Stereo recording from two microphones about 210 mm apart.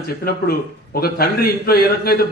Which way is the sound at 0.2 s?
45° left (ahead or behind).